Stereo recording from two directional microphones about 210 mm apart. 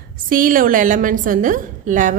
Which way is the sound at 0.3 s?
40° right (ahead or behind).